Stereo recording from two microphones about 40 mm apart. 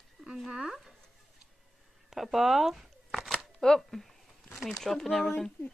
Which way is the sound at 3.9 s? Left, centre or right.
Centre.